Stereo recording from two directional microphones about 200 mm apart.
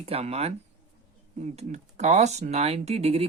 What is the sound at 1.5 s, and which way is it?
Speech, 35° right (ahead or behind).